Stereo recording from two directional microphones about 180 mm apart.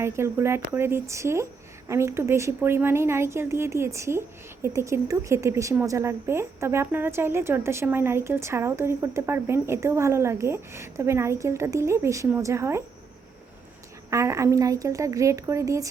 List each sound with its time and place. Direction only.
0.0 s a woman's voice: 15° right (ahead or behind)
14.1 s a woman's voice: 15° right (ahead or behind)